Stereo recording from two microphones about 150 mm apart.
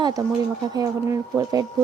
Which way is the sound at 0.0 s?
25° right (ahead or behind).